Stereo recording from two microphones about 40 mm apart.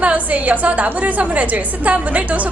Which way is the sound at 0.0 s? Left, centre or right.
Right.